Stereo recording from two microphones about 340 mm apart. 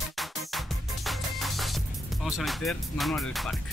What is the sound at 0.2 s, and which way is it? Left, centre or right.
Music, centre.